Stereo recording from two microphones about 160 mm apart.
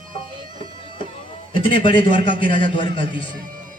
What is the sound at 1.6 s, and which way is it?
A man's voice, 30° left (ahead or behind).